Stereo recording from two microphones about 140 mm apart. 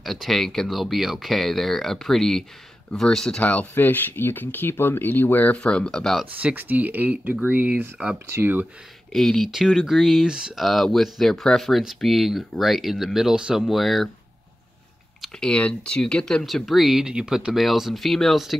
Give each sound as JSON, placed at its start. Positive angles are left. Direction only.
{"t": 0.0, "sound": "speech", "side_deg": 0}
{"t": 6.4, "sound": "speech", "side_deg": -15}
{"t": 9.1, "sound": "speech", "side_deg": 0}
{"t": 15.2, "sound": "speech", "side_deg": 5}